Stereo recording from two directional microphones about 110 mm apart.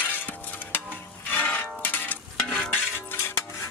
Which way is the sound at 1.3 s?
15° left (ahead or behind).